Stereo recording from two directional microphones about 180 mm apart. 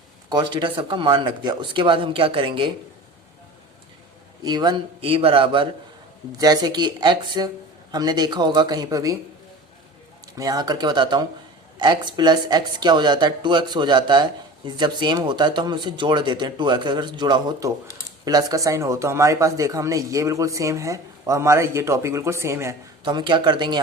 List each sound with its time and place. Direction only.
0.3 s speech: 25° right (ahead or behind)
4.4 s speech: 25° right (ahead or behind)
10.3 s speech: 20° right (ahead or behind)
23.0 s speech: 25° right (ahead or behind)